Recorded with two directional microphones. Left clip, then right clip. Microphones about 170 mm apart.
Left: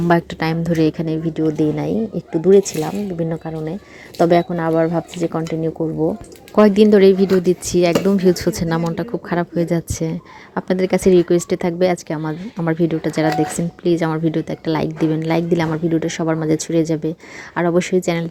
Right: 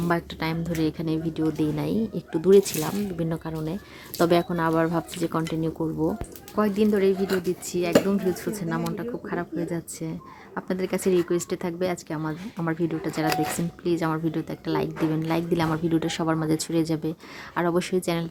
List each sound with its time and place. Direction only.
0.1 s a woman's voice: 30° left (ahead or behind); by 6.0 s 5° left (ahead or behind)
6.6 s a woman's voice: 35° left (ahead or behind); by 18.3 s 20° left (ahead or behind)